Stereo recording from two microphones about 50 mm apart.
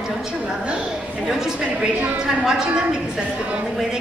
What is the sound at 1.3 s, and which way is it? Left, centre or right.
A woman's voice, centre.